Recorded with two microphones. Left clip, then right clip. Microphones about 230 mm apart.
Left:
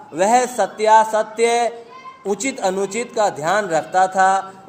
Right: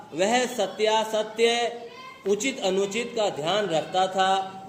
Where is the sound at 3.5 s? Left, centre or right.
Left.